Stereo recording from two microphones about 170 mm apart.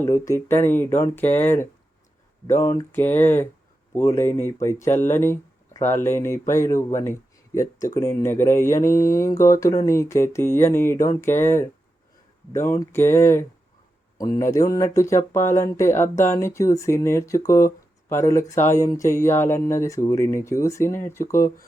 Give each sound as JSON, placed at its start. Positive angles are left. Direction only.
{"t": 0.0, "sound": "speech", "side_deg": 15}